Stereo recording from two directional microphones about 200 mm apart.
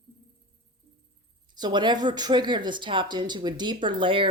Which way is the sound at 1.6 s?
20° right (ahead or behind).